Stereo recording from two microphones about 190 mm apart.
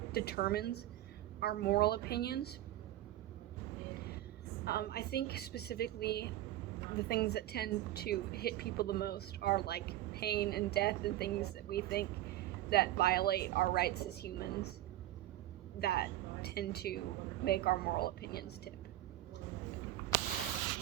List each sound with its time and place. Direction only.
0.1 s a woman's voice: 55° left (ahead or behind)
4.6 s a woman's voice: 55° left (ahead or behind)
15.8 s a woman's voice: 55° left (ahead or behind)